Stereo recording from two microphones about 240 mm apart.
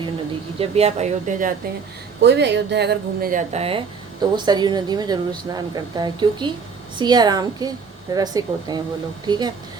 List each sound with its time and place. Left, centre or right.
0.6 s speech: right
2.2 s speech: right; by 9.5 s centre